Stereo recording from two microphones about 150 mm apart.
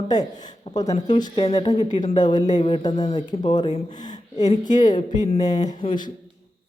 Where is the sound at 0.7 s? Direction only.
40° left (ahead or behind).